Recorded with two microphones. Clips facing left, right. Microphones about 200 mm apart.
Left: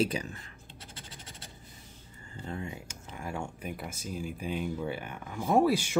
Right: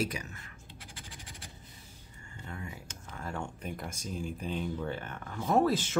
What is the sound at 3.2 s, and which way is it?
Speech, 10° left (ahead or behind).